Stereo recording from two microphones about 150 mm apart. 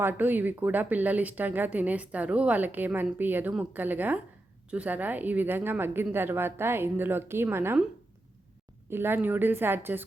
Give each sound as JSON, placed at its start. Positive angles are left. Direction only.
{"t": 0.0, "sound": "speech", "side_deg": -10}
{"t": 8.9, "sound": "speech", "side_deg": -15}